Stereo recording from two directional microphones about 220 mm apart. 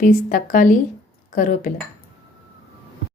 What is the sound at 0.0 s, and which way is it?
A woman's voice, 40° left (ahead or behind).